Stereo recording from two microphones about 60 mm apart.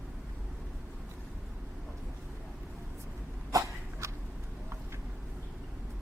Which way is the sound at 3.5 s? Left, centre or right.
Right.